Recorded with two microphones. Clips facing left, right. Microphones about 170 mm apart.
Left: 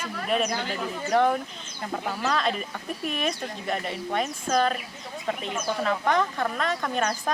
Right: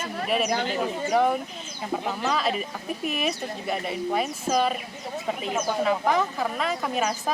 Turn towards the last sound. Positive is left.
turn(degrees=-5)  # may be behind; listen again after turning